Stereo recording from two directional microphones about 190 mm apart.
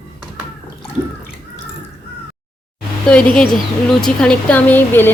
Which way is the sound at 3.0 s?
5° left (ahead or behind).